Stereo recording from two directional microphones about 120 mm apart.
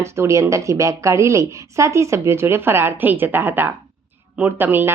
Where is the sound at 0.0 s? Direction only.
25° right (ahead or behind).